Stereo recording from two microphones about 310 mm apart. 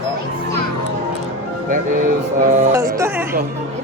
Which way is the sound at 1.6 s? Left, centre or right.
Right.